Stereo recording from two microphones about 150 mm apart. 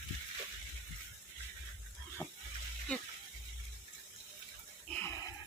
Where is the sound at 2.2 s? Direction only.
15° left (ahead or behind).